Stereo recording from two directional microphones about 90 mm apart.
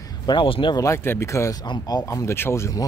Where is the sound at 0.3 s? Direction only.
65° left (ahead or behind).